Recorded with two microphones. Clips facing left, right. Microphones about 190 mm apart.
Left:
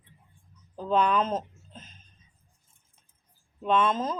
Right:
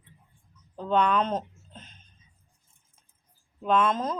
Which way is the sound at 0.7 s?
5° left (ahead or behind).